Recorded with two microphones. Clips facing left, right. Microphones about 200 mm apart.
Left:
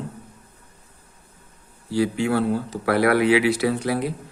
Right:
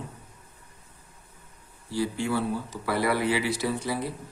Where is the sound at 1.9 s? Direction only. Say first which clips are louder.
Left 6 dB; 85° left.